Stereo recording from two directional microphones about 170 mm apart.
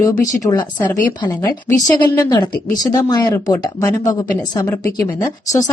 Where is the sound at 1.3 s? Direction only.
15° left (ahead or behind).